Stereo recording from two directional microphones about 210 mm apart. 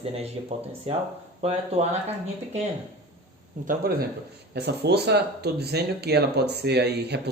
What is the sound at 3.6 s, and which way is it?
Speech, 45° right (ahead or behind).